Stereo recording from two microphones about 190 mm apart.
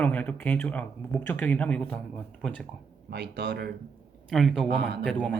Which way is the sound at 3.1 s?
60° right (ahead or behind).